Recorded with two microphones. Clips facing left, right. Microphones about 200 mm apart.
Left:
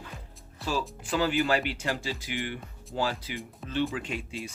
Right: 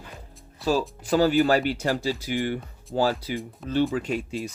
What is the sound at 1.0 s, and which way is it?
Speech, 40° right (ahead or behind).